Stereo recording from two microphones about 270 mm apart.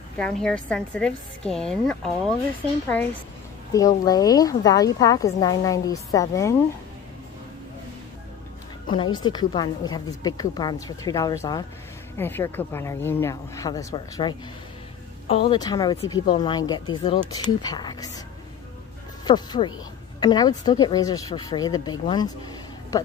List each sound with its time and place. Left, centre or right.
0.2 s a woman's voice: centre
8.9 s a woman's voice: centre
19.2 s a woman's voice: centre